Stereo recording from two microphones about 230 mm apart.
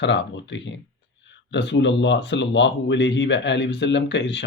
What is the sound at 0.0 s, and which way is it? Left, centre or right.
Speech, left.